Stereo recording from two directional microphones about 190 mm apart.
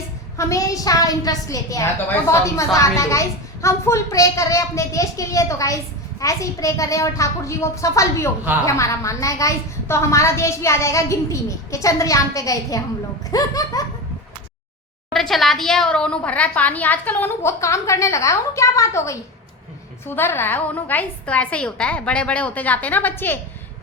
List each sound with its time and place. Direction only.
0.3 s a child's voice: 15° left (ahead or behind)
15.1 s a child's voice: centre (ahead or behind)